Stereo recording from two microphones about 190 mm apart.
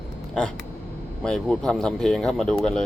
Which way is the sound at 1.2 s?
5° left (ahead or behind).